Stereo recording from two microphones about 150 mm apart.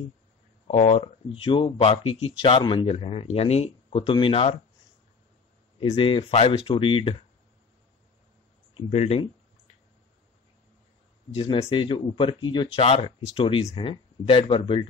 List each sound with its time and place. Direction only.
0.7 s speech: 40° left (ahead or behind)
5.9 s speech: 35° left (ahead or behind)
8.8 s speech: 45° left (ahead or behind)
11.4 s speech: 20° left (ahead or behind)
11.7 s speech: 35° left (ahead or behind)